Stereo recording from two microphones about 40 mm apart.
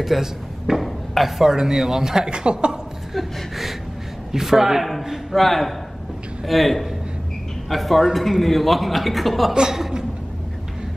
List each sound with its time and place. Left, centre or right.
0.0 s speech: centre; by 2.8 s right
3.2 s gasp: centre
4.3 s a man's voice: centre
5.4 s a man's voice: centre
9.5 s speech: centre